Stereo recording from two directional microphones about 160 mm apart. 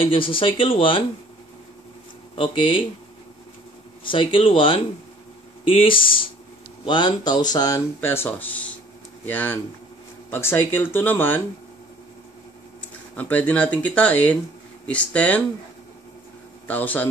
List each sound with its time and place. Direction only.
0.0 s speech: 35° left (ahead or behind)
2.3 s speech: 35° left (ahead or behind)
4.1 s speech: 35° left (ahead or behind); by 11.4 s 15° left (ahead or behind)
12.8 s speech: 10° left (ahead or behind)
16.6 s speech: 10° left (ahead or behind)